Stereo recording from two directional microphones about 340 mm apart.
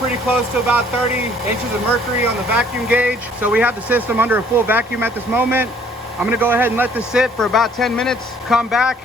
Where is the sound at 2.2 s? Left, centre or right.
Centre.